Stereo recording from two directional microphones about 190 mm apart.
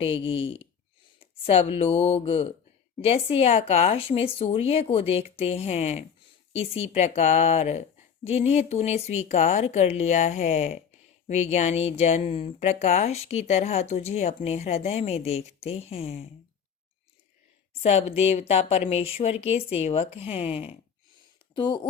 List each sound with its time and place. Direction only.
0.0 s speech: 30° left (ahead or behind)
17.8 s speech: 35° left (ahead or behind)